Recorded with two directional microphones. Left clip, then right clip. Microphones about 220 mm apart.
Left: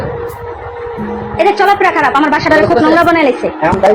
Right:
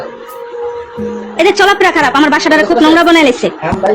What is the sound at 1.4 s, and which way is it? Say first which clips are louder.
A woman's voice: right 1 dB; 30° right (ahead or behind).